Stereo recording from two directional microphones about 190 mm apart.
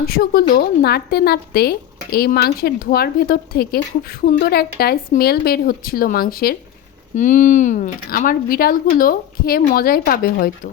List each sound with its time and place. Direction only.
0.0 s a woman's voice: 55° left (ahead or behind)
7.2 s speech: 40° left (ahead or behind)